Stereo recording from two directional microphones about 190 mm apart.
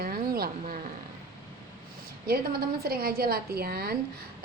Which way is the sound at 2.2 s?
55° right (ahead or behind).